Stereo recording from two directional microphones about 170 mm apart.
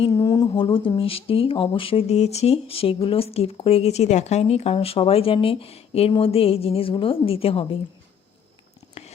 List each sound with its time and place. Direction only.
0.0 s speech: 25° left (ahead or behind)